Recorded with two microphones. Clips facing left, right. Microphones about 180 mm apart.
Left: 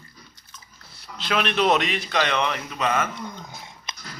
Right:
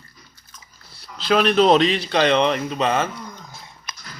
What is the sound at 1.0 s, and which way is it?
Speech, 35° right (ahead or behind).